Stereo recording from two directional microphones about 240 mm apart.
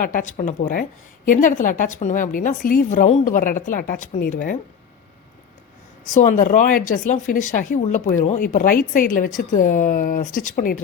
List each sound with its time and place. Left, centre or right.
0.0 s speech: left
6.1 s speech: left